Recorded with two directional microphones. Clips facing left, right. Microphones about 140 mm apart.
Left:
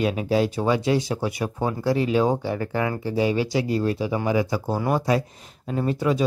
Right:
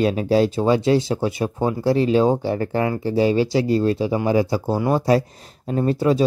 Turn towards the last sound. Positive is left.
turn(degrees=-35)  # may be behind; listen again after turning